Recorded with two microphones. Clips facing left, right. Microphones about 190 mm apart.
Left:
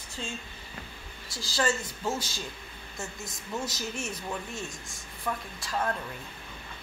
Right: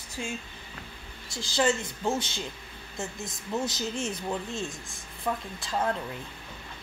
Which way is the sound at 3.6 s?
25° right (ahead or behind).